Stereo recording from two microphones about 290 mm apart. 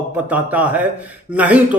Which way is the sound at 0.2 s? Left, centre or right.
Centre.